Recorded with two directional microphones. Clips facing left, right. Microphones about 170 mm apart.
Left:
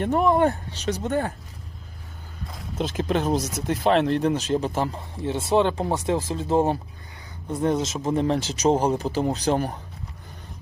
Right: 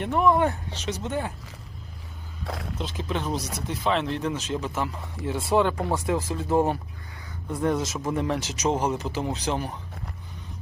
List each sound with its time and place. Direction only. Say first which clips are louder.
0.0 s speech: left 2 dB; 40° left (ahead or behind)
2.7 s speech: left 8 dB; 55° left (ahead or behind)